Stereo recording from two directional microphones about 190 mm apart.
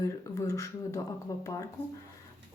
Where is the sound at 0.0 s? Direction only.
15° left (ahead or behind).